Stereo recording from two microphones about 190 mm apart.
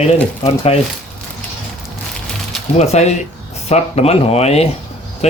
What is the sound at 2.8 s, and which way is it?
Speech, 35° left (ahead or behind).